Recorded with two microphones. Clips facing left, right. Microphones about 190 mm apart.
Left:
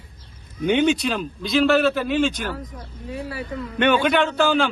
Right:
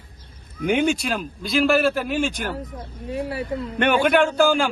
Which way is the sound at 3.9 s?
10° right (ahead or behind).